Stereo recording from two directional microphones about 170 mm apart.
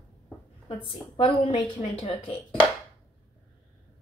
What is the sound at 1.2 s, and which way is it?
A woman's voice, 35° left (ahead or behind).